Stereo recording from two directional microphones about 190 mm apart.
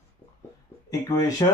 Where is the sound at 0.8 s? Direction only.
20° left (ahead or behind).